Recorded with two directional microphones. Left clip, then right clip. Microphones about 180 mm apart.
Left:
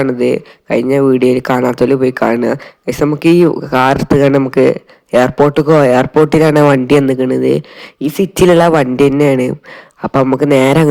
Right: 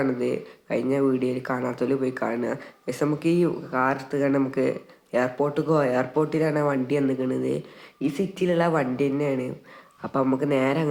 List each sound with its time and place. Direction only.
0.0 s speech: 40° left (ahead or behind)
8.0 s speech: 50° left (ahead or behind)